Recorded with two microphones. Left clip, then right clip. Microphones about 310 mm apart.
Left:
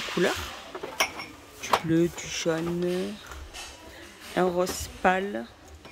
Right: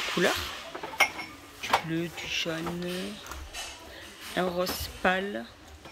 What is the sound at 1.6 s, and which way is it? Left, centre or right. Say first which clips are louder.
Speech: left 4 dB; centre.